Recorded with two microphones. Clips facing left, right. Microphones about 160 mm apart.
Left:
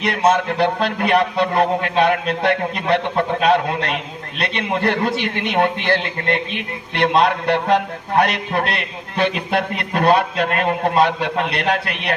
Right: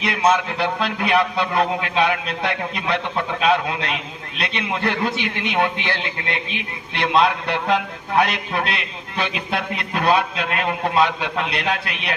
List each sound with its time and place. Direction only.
0.0 s a man's voice: 50° left (ahead or behind)